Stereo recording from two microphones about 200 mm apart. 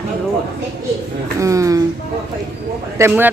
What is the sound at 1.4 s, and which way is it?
Speech, 15° right (ahead or behind).